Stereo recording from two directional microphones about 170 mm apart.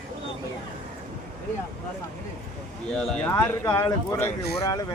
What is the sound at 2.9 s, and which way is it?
Speech, 5° left (ahead or behind).